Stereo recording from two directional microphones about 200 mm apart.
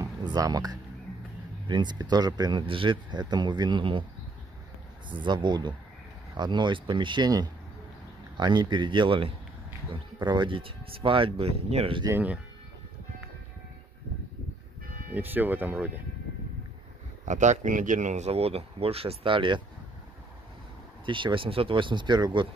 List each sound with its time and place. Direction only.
0.0 s music: 20° right (ahead or behind)
1.7 s speech: 20° right (ahead or behind)
5.1 s speech: 25° right (ahead or behind)
12.1 s speech: 10° right (ahead or behind)
15.1 s speech: 10° right (ahead or behind)
17.2 s speech: 35° right (ahead or behind)
21.0 s speech: 25° right (ahead or behind)